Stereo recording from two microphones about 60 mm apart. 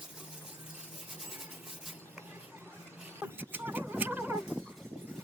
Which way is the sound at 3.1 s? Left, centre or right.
Right.